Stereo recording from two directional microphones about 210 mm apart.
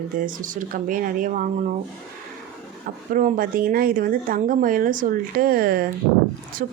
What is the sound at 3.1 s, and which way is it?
Speech, 45° right (ahead or behind).